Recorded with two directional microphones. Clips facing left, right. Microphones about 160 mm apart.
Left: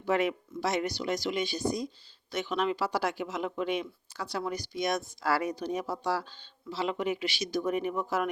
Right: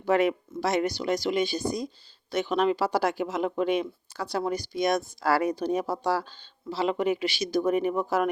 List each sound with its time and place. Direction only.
0.0 s speech: 45° right (ahead or behind)